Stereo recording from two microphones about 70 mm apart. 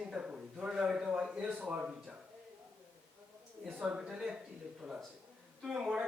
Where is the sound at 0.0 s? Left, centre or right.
Centre.